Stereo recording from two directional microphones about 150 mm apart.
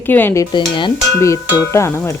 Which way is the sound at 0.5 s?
30° left (ahead or behind).